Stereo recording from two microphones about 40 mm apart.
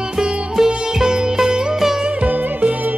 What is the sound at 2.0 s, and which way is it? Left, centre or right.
Music, right.